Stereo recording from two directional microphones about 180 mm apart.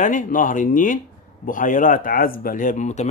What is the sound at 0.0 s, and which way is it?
Speech, 45° left (ahead or behind).